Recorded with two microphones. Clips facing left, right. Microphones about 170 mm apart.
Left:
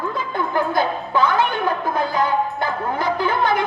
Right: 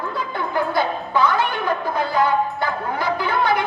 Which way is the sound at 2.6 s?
50° left (ahead or behind).